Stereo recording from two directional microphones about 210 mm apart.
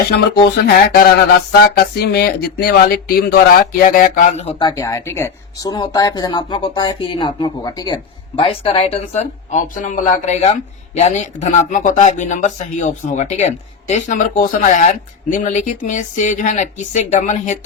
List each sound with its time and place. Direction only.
0.6 s speech: 45° left (ahead or behind)
4.7 s speech: 15° left (ahead or behind); by 17.6 s 35° left (ahead or behind)